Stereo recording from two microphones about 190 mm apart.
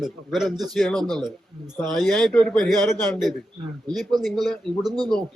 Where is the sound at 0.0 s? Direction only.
Centre (ahead or behind).